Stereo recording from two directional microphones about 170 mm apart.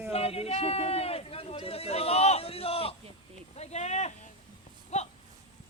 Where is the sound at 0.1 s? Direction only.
35° left (ahead or behind).